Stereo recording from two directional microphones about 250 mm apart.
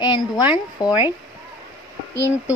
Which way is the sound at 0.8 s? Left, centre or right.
Centre.